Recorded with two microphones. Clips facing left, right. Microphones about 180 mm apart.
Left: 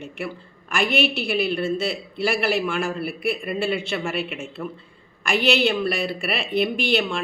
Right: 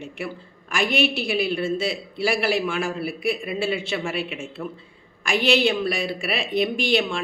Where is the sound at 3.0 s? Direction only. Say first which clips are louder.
Even; 50° left (ahead or behind).